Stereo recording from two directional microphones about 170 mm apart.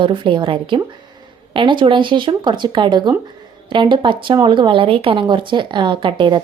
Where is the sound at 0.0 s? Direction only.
30° right (ahead or behind).